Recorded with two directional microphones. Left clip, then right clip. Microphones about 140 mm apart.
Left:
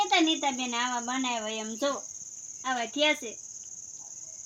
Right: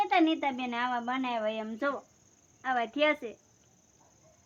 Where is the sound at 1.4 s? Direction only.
20° left (ahead or behind).